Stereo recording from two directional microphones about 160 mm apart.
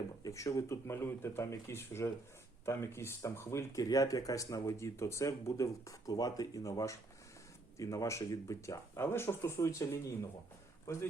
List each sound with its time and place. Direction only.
0.3 s speech: 20° left (ahead or behind)